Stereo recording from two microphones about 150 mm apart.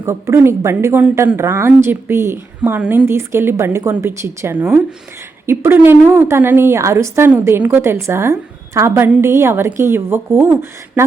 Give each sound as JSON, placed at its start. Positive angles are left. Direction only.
{"t": 0.0, "sound": "a woman's voice", "side_deg": -15}